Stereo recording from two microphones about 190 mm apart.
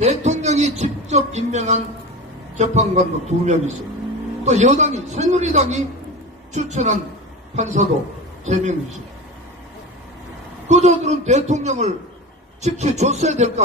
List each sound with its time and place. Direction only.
0.0 s a sound: 35° right (ahead or behind)
2.5 s a man's voice: 35° right (ahead or behind)
10.7 s a man's voice: 35° right (ahead or behind)